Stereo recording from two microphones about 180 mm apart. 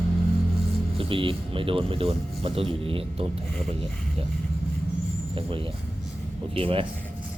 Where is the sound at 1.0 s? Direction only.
30° right (ahead or behind).